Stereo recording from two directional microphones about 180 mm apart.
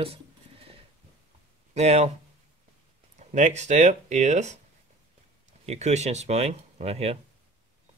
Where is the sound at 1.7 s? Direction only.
35° right (ahead or behind).